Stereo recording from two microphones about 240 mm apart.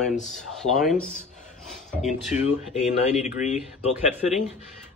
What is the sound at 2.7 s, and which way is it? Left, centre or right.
Speech, left.